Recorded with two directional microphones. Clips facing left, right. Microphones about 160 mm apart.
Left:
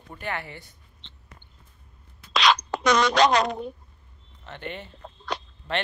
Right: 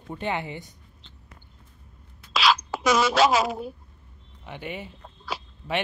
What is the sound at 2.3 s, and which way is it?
Writing, 5° right (ahead or behind).